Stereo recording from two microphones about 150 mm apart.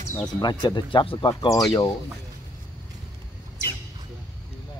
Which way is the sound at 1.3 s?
25° left (ahead or behind).